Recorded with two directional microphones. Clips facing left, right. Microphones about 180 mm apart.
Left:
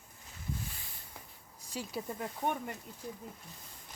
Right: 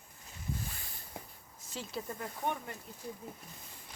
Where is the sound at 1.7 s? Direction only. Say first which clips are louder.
Left 2 dB; 10° left (ahead or behind).